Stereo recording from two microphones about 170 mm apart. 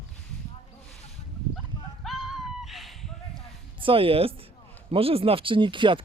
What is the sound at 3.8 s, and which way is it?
Speech, 30° right (ahead or behind).